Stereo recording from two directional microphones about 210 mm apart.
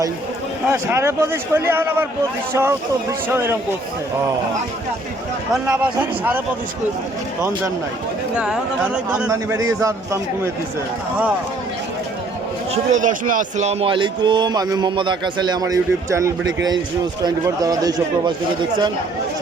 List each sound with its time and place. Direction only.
0.7 s speech: 10° right (ahead or behind)
5.6 s speech: 5° right (ahead or behind)
8.4 s speech: 5° right (ahead or behind)
12.7 s a man's voice: 35° right (ahead or behind); by 18.3 s 20° right (ahead or behind)